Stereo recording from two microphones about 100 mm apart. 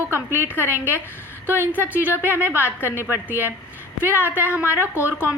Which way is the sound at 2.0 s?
20° right (ahead or behind).